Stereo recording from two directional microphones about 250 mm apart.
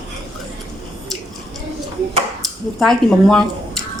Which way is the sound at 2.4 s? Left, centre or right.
Centre.